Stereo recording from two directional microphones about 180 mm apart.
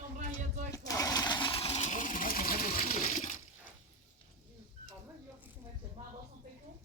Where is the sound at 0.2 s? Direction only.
45° right (ahead or behind).